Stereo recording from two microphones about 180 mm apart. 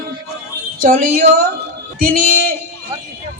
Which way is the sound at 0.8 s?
55° right (ahead or behind).